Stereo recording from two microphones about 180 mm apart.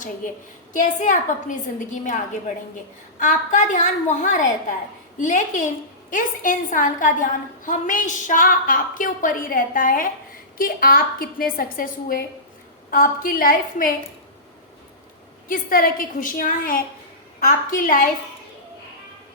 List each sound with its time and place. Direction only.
0.7 s a woman's voice: 45° left (ahead or behind)
3.2 s a woman's voice: 45° left (ahead or behind)
15.4 s a woman's voice: 50° left (ahead or behind)